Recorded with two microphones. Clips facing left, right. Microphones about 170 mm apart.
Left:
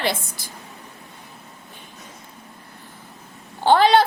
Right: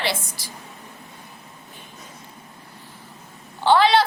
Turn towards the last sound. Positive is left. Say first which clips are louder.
# left 2 dB
turn(degrees=50)  # may be behind; listen again after turning